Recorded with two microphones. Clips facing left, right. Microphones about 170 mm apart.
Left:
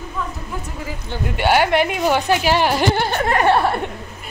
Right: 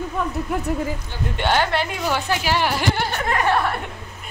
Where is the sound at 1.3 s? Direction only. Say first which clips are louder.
Left 4 dB; 10° left (ahead or behind).